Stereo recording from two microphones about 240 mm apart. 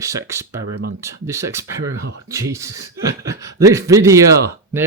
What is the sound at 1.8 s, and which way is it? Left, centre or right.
Speech, right.